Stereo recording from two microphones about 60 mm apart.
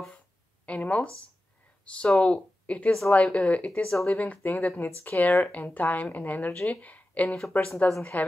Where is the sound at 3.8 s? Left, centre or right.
Centre.